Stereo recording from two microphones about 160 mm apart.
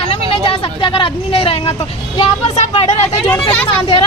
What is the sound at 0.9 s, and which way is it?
Speech, 35° left (ahead or behind).